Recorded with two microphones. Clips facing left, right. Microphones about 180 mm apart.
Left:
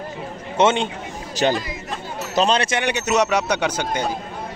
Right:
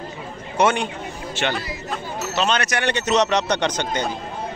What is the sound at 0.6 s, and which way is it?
Speech, 25° left (ahead or behind).